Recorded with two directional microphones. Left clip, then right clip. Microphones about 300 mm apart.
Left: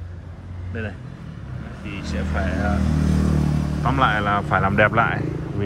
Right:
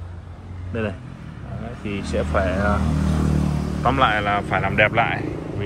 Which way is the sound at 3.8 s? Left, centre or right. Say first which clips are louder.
Right 2 dB; centre.